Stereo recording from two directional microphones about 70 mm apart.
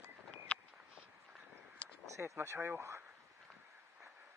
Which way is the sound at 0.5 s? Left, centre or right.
Centre.